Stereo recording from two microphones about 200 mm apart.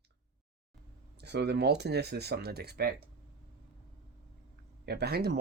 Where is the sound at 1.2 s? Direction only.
55° right (ahead or behind).